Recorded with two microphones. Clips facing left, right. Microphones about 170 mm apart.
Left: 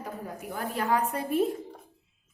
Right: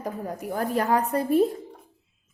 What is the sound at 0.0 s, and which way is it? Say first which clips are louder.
Speech: right 6 dB; 40° right (ahead or behind).